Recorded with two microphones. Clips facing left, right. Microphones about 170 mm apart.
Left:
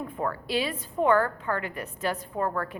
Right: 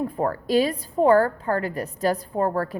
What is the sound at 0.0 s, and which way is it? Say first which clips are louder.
A woman's voice: right 6 dB; 40° right (ahead or behind).